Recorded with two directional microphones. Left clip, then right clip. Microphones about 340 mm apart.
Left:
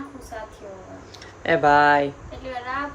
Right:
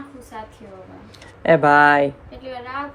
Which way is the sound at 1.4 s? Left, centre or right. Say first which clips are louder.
Right 4 dB; centre.